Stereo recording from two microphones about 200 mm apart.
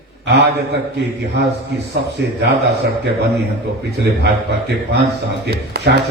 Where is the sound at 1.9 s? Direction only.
55° right (ahead or behind).